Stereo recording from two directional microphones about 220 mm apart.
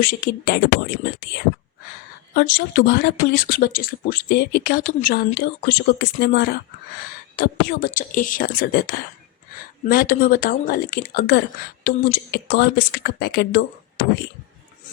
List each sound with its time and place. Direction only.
0.0 s speech: 40° left (ahead or behind)